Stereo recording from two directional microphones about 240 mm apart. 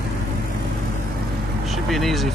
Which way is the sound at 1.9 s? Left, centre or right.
Centre.